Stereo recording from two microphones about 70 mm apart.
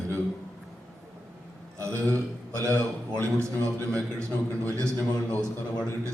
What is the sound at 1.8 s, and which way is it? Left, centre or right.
A man's voice, right.